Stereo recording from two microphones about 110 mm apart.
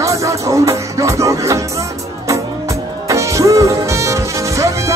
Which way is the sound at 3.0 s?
30° right (ahead or behind).